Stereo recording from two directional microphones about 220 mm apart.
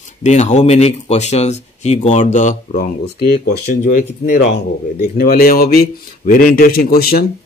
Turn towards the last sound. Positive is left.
turn(degrees=45)  # may be behind; listen again after turning